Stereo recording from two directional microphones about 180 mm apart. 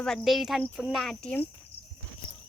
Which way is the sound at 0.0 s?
Centre (ahead or behind).